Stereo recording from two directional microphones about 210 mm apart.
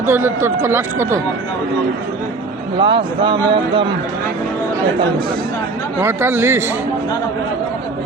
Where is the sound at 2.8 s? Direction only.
25° right (ahead or behind).